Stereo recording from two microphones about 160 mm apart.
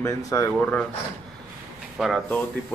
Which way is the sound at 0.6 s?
10° left (ahead or behind).